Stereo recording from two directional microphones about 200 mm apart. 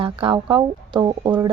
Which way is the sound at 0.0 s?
25° right (ahead or behind).